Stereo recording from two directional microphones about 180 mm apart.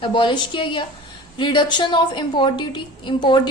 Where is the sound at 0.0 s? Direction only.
30° left (ahead or behind).